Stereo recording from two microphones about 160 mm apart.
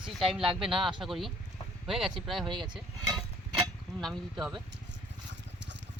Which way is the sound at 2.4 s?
30° right (ahead or behind).